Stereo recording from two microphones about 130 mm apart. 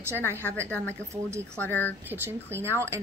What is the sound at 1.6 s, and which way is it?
Speech, 15° left (ahead or behind).